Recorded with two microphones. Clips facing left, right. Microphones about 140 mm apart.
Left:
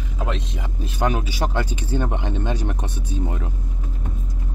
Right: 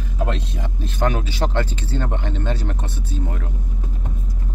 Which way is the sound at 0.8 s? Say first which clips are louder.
Even; 10° left (ahead or behind).